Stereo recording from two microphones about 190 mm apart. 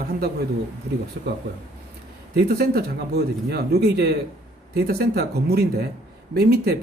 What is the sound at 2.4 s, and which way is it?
Speech, 55° right (ahead or behind).